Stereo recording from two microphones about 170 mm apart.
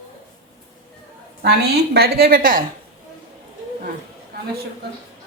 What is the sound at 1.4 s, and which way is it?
A woman's voice, 70° right (ahead or behind).